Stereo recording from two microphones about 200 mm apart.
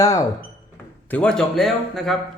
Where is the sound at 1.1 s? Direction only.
5° left (ahead or behind).